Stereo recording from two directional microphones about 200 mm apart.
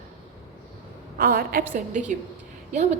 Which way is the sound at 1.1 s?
50° right (ahead or behind).